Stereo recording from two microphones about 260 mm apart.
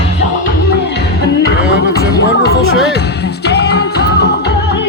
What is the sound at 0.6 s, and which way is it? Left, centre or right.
Music, left.